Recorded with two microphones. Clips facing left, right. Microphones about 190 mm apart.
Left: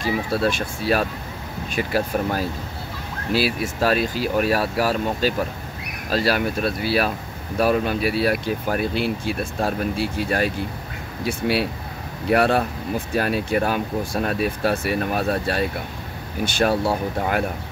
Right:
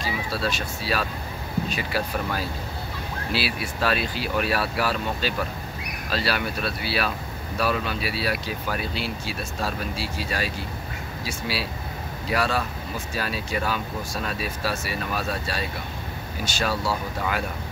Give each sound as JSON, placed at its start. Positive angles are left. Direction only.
{"t": 0.0, "sound": "speech", "side_deg": 50}